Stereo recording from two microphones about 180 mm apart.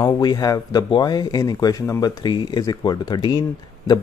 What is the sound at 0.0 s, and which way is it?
Speech, 20° left (ahead or behind).